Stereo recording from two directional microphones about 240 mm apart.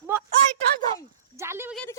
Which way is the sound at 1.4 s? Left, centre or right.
Centre.